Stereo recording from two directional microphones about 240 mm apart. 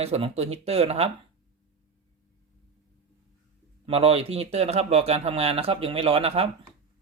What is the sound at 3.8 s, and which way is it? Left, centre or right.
Speech, right.